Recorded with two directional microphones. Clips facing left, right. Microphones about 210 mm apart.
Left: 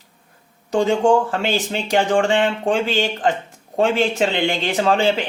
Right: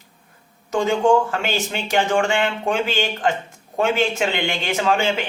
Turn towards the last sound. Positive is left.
turn(degrees=35)  # may be behind; listen again after turning